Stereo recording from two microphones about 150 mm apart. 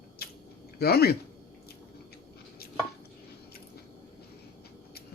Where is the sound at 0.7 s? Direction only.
90° left.